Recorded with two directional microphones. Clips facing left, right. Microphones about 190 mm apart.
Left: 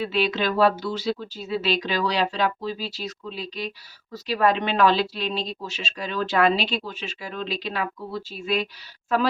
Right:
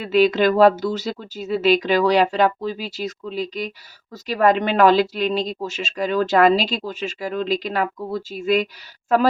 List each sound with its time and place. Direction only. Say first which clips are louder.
0.0 s speech: right 8 dB; 45° right (ahead or behind)